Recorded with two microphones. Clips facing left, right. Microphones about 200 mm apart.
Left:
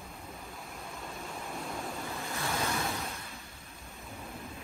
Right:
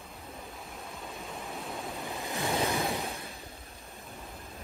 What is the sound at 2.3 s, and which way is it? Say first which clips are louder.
Waves: right 5 dB; 15° right (ahead or behind).